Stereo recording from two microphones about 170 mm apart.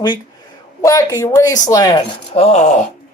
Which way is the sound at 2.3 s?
40° left (ahead or behind).